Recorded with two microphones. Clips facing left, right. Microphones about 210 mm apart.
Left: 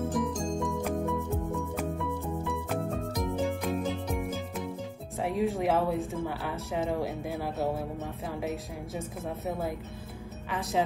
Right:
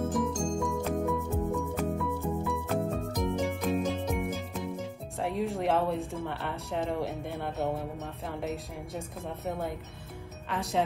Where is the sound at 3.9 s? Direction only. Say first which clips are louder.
Right 1 dB; centre (ahead or behind).